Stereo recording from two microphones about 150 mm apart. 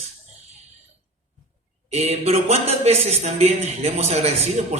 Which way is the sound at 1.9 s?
45° right (ahead or behind).